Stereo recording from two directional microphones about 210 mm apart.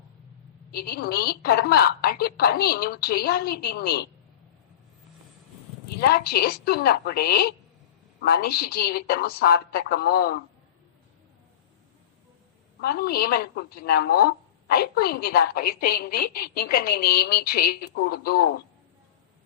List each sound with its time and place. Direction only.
0.7 s a woman's voice: 45° left (ahead or behind)
6.0 s a woman's voice: 45° left (ahead or behind)
12.8 s a woman's voice: 45° left (ahead or behind)